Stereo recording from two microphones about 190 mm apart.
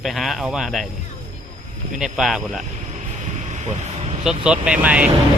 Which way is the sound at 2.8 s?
40° right (ahead or behind).